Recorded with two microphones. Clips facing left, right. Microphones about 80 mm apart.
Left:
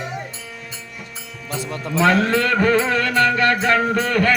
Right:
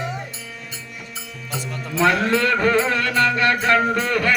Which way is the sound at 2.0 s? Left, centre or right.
Left.